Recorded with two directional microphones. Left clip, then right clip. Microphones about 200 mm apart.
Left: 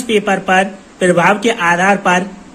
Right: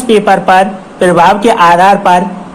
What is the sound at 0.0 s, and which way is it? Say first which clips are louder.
Speech: right 7 dB; 20° left (ahead or behind).